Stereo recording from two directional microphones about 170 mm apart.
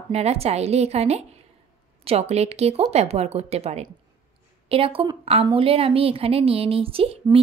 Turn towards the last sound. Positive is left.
turn(degrees=-35)  # may be behind; listen again after turning